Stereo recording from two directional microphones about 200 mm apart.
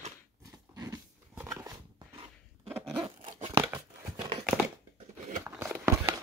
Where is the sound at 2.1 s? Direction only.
30° right (ahead or behind).